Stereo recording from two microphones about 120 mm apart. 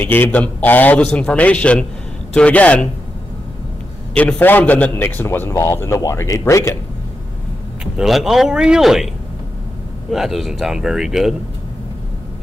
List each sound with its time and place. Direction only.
0.0 s a man's voice: 15° left (ahead or behind)
4.1 s a man's voice: 10° left (ahead or behind)
7.8 s speech: 5° right (ahead or behind)
10.1 s speech: centre (ahead or behind)